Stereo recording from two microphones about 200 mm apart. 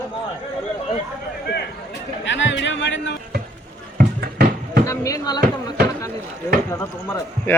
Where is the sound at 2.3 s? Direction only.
65° left (ahead or behind).